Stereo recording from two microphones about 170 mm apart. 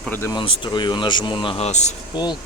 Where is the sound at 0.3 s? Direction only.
25° left (ahead or behind).